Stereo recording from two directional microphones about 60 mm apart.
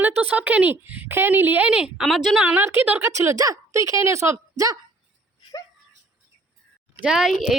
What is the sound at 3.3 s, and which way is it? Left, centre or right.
Speech, right.